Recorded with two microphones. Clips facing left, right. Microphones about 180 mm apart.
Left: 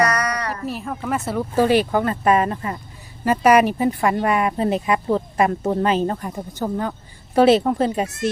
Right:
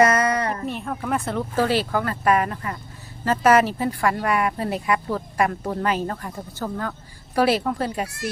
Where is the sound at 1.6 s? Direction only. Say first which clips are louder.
Left 5 dB; 15° left (ahead or behind).